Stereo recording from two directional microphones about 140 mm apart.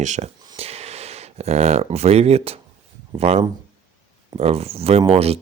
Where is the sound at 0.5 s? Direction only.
50° right (ahead or behind).